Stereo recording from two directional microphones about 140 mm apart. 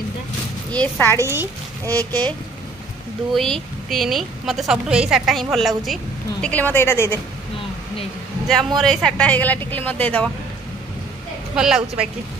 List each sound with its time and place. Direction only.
0.7 s speech: 15° left (ahead or behind)
1.2 s a woman's voice: 20° right (ahead or behind)
3.3 s a woman's voice: centre (ahead or behind)
6.4 s speech: 10° left (ahead or behind)
8.5 s speech: 5° left (ahead or behind)
11.5 s a woman's voice: 5° right (ahead or behind)